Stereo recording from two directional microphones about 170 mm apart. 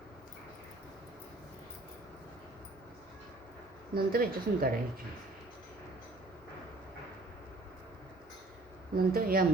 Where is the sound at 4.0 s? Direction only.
60° right (ahead or behind).